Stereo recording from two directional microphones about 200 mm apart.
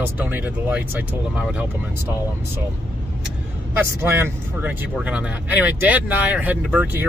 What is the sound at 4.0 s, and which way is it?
Speech, 10° right (ahead or behind).